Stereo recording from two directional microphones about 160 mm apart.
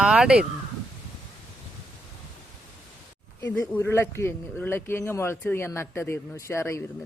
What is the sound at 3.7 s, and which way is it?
A man's voice, 10° left (ahead or behind).